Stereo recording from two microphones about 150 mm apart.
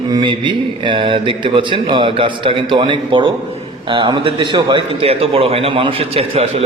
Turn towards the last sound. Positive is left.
turn(degrees=-40)  # may be behind; listen again after turning